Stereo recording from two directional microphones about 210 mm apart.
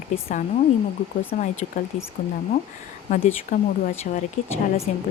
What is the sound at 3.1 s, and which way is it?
A woman's voice, 40° left (ahead or behind).